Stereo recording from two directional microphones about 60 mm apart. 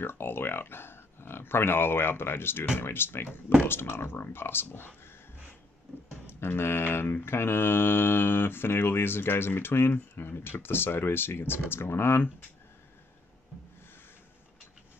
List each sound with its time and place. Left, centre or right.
0.0 s speech: left
2.8 s mantra: left
6.2 s mantra: left